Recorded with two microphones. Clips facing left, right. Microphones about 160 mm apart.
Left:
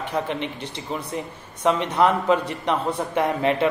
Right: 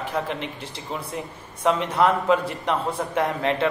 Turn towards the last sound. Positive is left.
turn(degrees=5)  # may be behind; listen again after turning